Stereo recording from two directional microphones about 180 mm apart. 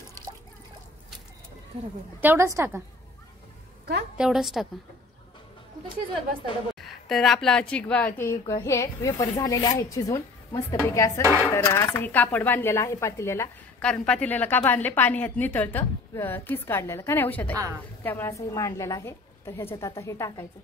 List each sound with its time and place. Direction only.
1.7 s speech: 30° right (ahead or behind)
2.1 s a woman's voice: 15° right (ahead or behind)
4.2 s a woman's voice: centre (ahead or behind)
6.8 s a woman's voice: centre (ahead or behind); by 10.8 s 15° left (ahead or behind)
11.2 s a woman's voice: 15° right (ahead or behind)
11.5 s speech: 15° left (ahead or behind)